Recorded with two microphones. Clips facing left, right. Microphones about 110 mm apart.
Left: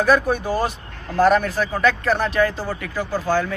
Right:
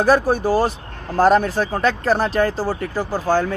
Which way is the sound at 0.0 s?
35° right (ahead or behind).